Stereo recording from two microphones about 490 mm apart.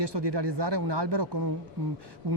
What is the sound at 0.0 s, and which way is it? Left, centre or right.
Speech, right.